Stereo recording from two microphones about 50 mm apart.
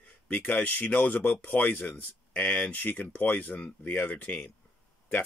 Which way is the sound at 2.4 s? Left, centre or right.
Left.